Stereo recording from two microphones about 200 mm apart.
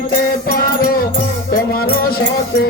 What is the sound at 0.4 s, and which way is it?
Music, 50° left (ahead or behind).